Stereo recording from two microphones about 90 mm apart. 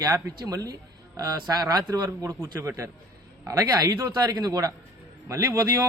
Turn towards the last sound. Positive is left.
turn(degrees=-35)  # may be behind; listen again after turning